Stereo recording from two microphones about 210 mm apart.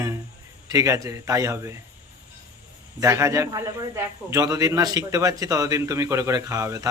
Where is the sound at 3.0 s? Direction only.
15° right (ahead or behind).